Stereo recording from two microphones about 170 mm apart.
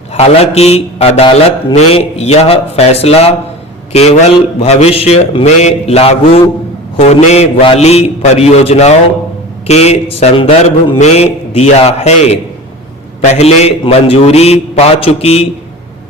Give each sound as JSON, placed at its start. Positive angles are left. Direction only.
{"t": 0.1, "sound": "a man's voice", "side_deg": 35}